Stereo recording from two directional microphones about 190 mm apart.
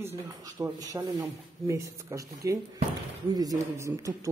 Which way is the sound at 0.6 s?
20° right (ahead or behind).